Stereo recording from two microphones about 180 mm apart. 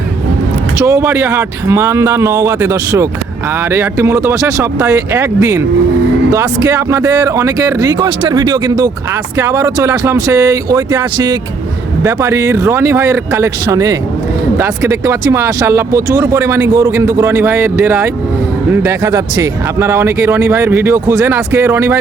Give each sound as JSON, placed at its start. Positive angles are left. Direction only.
{"t": 0.8, "sound": "speech", "side_deg": -15}